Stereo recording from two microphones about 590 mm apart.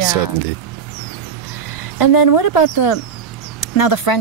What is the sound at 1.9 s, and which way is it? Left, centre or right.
Speech, left.